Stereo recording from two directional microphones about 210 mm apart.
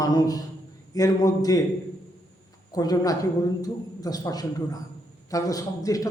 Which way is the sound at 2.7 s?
20° left (ahead or behind).